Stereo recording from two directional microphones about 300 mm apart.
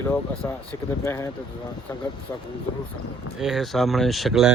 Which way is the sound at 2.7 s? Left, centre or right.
Left.